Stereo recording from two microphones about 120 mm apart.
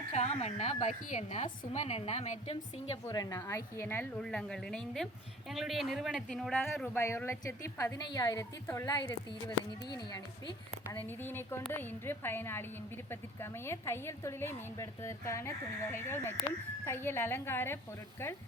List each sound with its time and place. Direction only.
0.1 s a woman's voice: 65° left (ahead or behind)
3.1 s a woman's voice: 30° left (ahead or behind)
4.2 s speech: 5° left (ahead or behind)
6.8 s a woman's voice: 20° left (ahead or behind)
9.0 s speech: 35° left (ahead or behind)
10.9 s a woman's voice: 15° left (ahead or behind)